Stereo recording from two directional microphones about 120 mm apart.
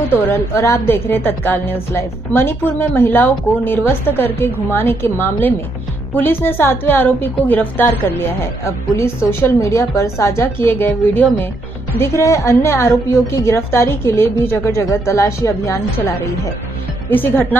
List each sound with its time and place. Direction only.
0.3 s a woman's voice: 20° left (ahead or behind)